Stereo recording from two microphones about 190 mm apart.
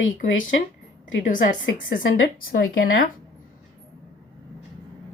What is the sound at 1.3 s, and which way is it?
Speech, 45° left (ahead or behind).